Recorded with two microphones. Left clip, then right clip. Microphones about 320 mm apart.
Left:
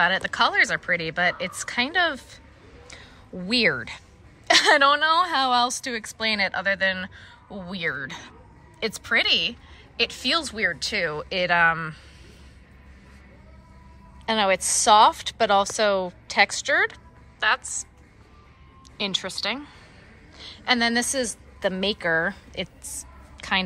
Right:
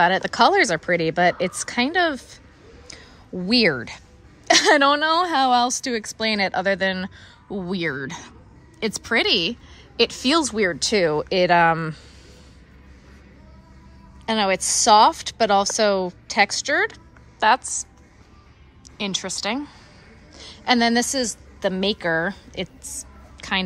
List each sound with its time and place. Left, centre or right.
0.0 s a woman's voice: centre
2.9 s a sound: centre
4.5 s a woman's voice: centre
14.2 s a woman's voice: centre
18.9 s a woman's voice: centre